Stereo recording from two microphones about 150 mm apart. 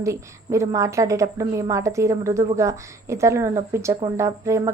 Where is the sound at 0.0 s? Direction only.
20° right (ahead or behind).